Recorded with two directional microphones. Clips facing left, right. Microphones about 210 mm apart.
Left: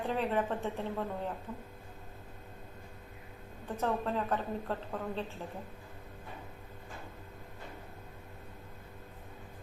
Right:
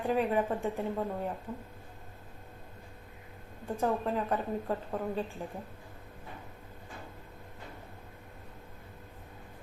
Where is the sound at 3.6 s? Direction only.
10° right (ahead or behind).